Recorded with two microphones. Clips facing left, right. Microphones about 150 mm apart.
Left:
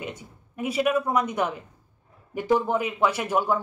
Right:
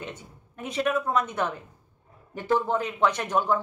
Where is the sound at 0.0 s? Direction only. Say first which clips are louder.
Left 3 dB; 10° left (ahead or behind).